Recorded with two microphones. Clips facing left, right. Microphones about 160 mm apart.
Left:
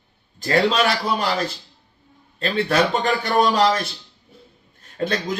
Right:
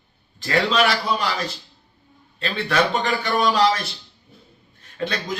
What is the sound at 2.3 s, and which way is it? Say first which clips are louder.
Speech: left 4 dB; 40° left (ahead or behind).